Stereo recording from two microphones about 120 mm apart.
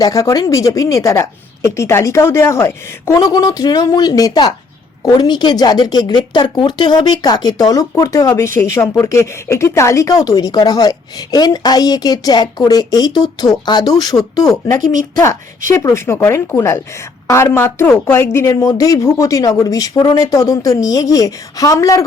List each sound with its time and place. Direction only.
0.0 s a woman's voice: 25° left (ahead or behind)